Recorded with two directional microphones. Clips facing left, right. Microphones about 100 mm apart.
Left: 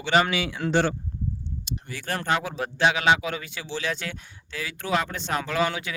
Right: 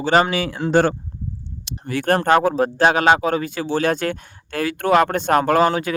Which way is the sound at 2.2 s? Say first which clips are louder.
Right 9 dB; 50° right (ahead or behind).